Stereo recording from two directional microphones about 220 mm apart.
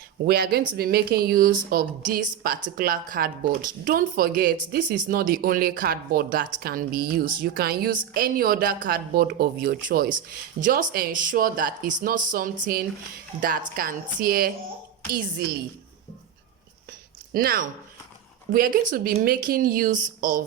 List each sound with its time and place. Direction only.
0.3 s speech: 45° right (ahead or behind)
17.3 s speech: 40° right (ahead or behind)